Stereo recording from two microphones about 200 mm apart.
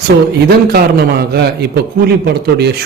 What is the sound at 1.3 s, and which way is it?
A man's voice, 55° right (ahead or behind).